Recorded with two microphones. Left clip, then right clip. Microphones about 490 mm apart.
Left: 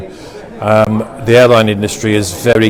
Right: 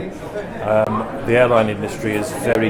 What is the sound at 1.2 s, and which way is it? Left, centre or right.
Speech, left.